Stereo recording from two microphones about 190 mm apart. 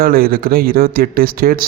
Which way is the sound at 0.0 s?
50° right (ahead or behind).